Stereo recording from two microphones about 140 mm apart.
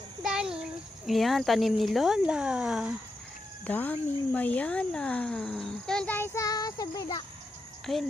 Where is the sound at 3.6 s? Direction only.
10° left (ahead or behind); by 7.3 s 25° left (ahead or behind).